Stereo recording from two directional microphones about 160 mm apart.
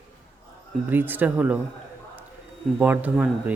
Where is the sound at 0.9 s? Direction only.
10° right (ahead or behind).